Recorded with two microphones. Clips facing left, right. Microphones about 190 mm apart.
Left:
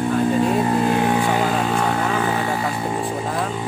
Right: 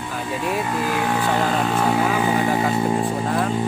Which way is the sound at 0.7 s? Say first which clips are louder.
Left 4 dB; 30° left (ahead or behind).